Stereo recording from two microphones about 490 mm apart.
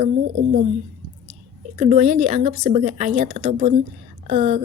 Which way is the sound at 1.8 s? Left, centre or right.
Centre.